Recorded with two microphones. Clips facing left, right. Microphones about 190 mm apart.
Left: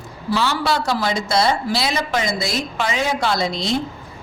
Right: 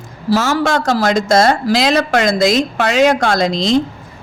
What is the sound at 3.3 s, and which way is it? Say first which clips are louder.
Speech: right 6 dB; 90° right.